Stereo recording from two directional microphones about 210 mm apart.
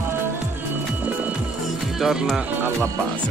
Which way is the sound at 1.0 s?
5° right (ahead or behind).